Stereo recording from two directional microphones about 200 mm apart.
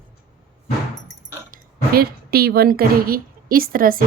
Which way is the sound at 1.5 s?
50° right (ahead or behind).